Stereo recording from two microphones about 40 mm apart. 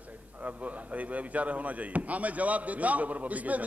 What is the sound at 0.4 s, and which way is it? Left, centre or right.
A man's voice, right.